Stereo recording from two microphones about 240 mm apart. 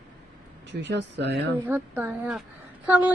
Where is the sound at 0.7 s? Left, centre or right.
Right.